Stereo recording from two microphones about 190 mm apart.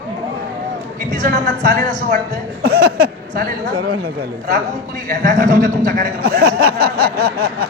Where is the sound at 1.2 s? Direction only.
50° right (ahead or behind).